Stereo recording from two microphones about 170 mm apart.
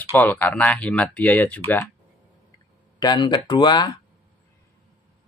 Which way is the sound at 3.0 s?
25° left (ahead or behind).